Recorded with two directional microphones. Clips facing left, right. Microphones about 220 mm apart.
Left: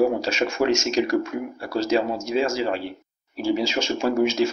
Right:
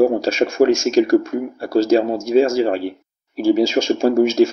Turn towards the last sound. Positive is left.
turn(degrees=-45)  # may be behind; listen again after turning